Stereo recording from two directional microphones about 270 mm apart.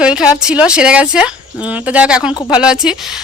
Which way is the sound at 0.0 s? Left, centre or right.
Centre.